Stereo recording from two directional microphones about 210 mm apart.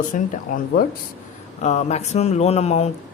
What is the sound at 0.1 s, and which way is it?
Speech, 40° left (ahead or behind).